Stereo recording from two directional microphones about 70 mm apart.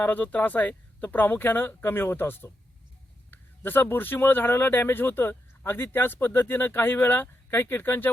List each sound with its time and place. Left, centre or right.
0.0 s speech: left